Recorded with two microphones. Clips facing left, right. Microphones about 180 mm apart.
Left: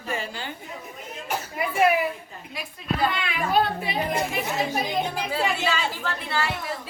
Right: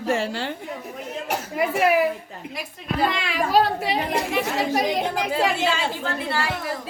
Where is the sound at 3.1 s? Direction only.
90° right.